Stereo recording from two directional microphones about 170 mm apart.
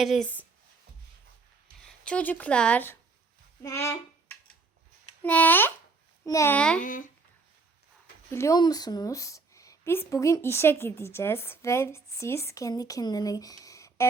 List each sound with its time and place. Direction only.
0.0 s speech: centre (ahead or behind)
1.9 s a woman's voice: 5° left (ahead or behind)
6.8 s speech: 50° left (ahead or behind)
8.3 s a woman's voice: 15° left (ahead or behind)